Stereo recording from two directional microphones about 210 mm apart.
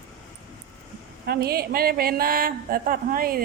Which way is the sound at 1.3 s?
45° right (ahead or behind).